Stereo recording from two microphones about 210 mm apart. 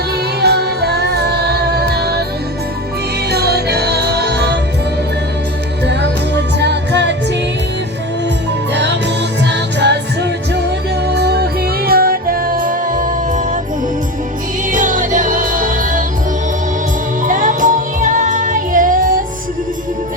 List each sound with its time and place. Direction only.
0.4 s music: 50° right (ahead or behind)
3.2 s music: 50° right (ahead or behind)
5.8 s music: 55° right (ahead or behind)
8.7 s music: 55° right (ahead or behind); by 13.6 s 40° right (ahead or behind)
14.7 s music: 40° right (ahead or behind)
17.2 s music: 40° right (ahead or behind)